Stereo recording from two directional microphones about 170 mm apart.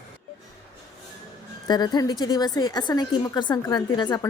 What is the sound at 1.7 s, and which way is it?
A woman's voice, 25° left (ahead or behind).